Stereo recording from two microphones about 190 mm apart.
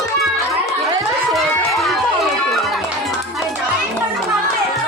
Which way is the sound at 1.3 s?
Centre (ahead or behind).